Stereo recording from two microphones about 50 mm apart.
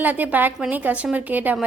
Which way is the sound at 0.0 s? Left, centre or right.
Right.